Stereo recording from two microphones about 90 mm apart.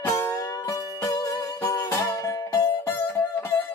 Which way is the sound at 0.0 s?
30° left (ahead or behind).